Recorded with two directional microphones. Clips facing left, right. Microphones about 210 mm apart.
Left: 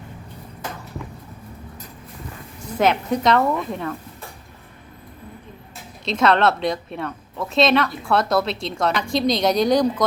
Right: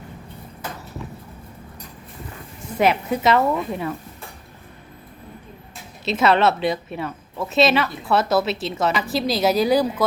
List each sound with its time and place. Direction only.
2.7 s a woman's voice: 5° right (ahead or behind)
6.1 s a woman's voice: 5° right (ahead or behind)